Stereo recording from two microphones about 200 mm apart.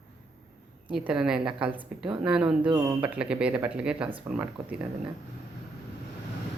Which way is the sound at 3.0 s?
5° right (ahead or behind).